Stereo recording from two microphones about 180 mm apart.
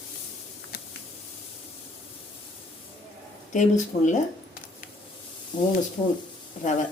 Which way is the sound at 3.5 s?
45° left (ahead or behind).